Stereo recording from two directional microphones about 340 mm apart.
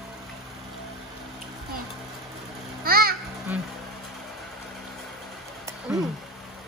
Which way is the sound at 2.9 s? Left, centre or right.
Right.